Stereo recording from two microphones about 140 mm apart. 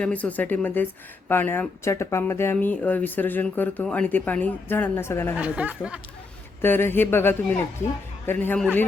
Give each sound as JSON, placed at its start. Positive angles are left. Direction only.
{"t": 0.0, "sound": "speech", "side_deg": 10}
{"t": 5.4, "sound": "speech", "side_deg": -10}
{"t": 6.6, "sound": "speech", "side_deg": 15}